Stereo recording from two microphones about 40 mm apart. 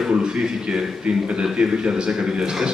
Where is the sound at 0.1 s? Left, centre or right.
Right.